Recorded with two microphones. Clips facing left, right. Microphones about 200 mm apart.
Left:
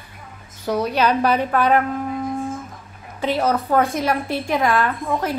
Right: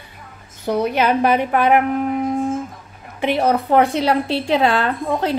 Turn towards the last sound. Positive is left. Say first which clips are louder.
# right 2 dB
turn(degrees=-30)  # may be behind; listen again after turning